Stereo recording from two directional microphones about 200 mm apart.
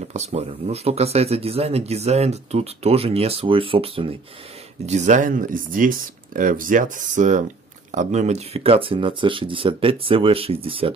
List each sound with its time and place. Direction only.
0.1 s speech: 35° right (ahead or behind)